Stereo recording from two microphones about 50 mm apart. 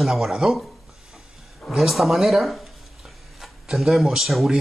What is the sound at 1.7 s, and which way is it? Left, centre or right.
Speech, centre.